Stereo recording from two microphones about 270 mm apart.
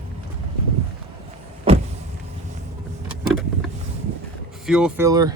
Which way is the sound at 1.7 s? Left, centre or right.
Right.